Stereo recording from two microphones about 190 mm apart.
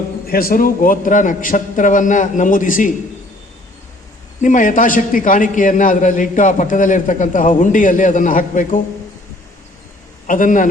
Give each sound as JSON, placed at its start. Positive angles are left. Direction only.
{"t": 0.3, "sound": "a man's voice", "side_deg": 50}
{"t": 4.4, "sound": "a man's voice", "side_deg": 45}
{"t": 10.2, "sound": "a man's voice", "side_deg": 45}